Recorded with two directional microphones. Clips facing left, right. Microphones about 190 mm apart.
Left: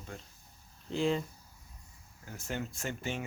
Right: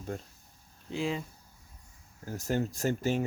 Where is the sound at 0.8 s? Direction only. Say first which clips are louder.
Left 2 dB; centre (ahead or behind).